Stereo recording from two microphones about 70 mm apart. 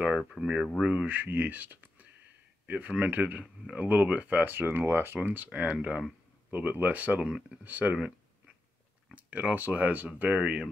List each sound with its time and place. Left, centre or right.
0.4 s speech: centre
9.1 s speech: right